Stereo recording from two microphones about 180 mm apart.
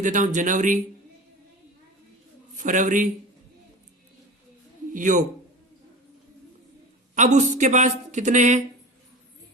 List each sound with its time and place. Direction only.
0.0 s a man's voice: 45° right (ahead or behind)
2.6 s a man's voice: 45° right (ahead or behind)
4.9 s a man's voice: 45° right (ahead or behind)
7.3 s speech: 40° right (ahead or behind)